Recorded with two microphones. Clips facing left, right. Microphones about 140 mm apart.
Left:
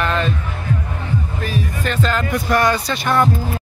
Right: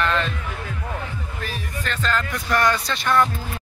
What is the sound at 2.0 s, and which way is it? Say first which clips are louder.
Speech: left 2 dB; 15° left (ahead or behind).